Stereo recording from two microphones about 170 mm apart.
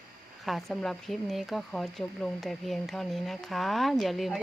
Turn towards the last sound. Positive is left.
turn(degrees=0)  # may be behind; listen again after turning